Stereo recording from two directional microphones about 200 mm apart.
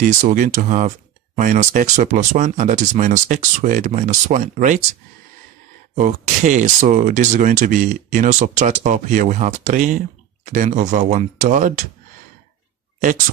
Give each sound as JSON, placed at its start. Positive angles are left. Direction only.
{"t": 0.0, "sound": "speech", "side_deg": -40}
{"t": 5.9, "sound": "speech", "side_deg": -40}